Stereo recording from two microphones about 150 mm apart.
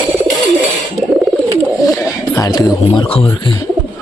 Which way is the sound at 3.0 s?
40° left (ahead or behind).